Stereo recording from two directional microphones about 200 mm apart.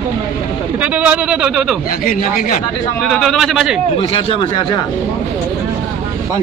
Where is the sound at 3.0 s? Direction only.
Centre (ahead or behind).